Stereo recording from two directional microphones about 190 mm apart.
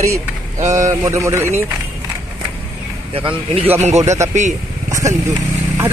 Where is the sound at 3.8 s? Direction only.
35° right (ahead or behind).